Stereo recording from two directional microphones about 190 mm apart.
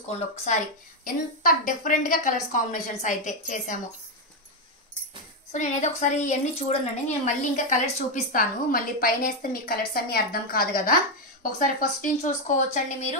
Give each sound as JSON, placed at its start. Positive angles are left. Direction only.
{"t": 1.0, "sound": "a woman's voice", "side_deg": 45}
{"t": 5.5, "sound": "a woman's voice", "side_deg": 40}